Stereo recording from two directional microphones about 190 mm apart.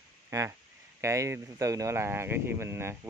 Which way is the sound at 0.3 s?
15° right (ahead or behind).